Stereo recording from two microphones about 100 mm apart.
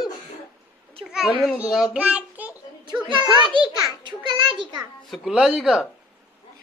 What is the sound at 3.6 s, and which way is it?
A child's voice, 50° right (ahead or behind).